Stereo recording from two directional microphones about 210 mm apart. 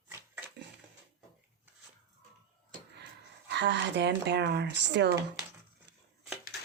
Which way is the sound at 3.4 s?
55° right (ahead or behind).